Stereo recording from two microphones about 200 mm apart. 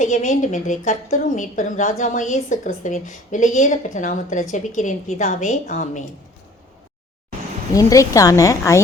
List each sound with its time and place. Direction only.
0.0 s a woman's voice: 35° left (ahead or behind)
7.7 s speech: 15° left (ahead or behind)